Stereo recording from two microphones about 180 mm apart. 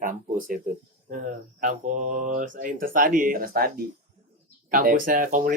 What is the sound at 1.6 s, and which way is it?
Speech, 45° right (ahead or behind).